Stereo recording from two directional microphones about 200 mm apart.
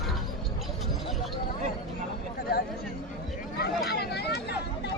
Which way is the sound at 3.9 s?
55° left (ahead or behind).